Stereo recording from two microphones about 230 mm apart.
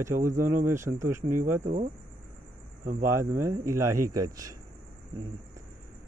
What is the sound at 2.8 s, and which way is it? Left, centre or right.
Speech, right.